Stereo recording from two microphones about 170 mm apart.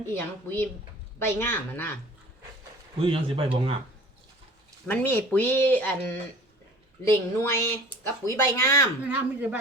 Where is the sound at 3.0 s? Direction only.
35° right (ahead or behind).